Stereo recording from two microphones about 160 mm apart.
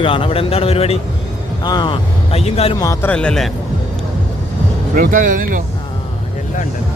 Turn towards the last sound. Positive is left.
turn(degrees=-55)  # may be behind; listen again after turning